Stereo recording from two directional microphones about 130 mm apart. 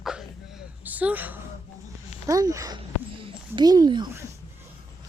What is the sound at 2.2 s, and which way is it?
Speech, 25° right (ahead or behind).